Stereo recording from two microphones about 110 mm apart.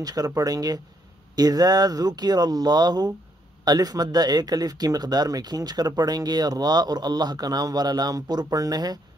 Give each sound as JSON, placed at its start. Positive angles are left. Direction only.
{"t": 0.0, "sound": "speech", "side_deg": -35}